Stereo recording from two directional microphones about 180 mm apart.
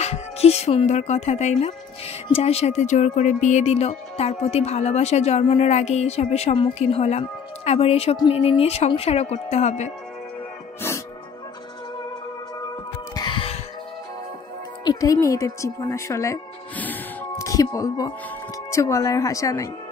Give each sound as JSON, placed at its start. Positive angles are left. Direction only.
{"t": 0.0, "sound": "speech", "side_deg": 35}
{"t": 13.1, "sound": "music", "side_deg": 25}
{"t": 14.9, "sound": "a woman's voice", "side_deg": 20}